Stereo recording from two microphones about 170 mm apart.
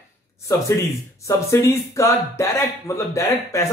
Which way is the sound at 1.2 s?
15° left (ahead or behind).